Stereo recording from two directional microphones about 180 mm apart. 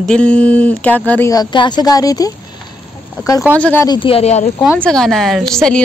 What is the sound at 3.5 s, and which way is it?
Speech, 10° left (ahead or behind).